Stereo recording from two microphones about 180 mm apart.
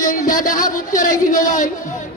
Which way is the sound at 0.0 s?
45° left (ahead or behind).